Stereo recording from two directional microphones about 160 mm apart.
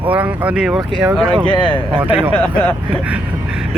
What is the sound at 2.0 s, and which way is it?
Speech, 10° right (ahead or behind).